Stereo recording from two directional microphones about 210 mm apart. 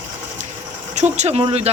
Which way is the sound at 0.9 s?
35° right (ahead or behind).